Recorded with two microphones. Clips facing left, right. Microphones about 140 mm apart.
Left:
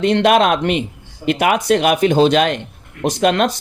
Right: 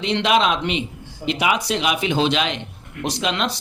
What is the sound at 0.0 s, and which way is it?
Speech, 50° left (ahead or behind).